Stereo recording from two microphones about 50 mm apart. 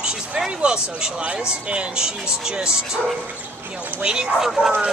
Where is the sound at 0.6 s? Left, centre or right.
Right.